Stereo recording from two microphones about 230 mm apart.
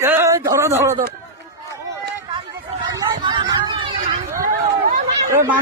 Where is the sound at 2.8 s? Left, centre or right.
Centre.